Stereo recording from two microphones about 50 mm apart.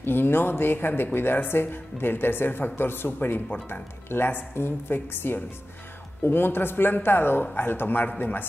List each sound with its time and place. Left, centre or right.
0.0 s speech: left
3.6 s a man's voice: left